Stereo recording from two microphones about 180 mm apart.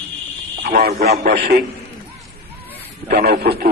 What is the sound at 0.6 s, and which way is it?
A man's voice, 55° right (ahead or behind).